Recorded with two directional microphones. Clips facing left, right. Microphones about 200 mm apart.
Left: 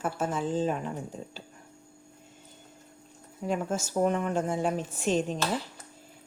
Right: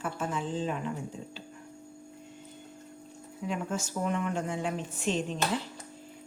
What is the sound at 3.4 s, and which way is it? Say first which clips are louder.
A woman's voice: left 3 dB; 45° left (ahead or behind).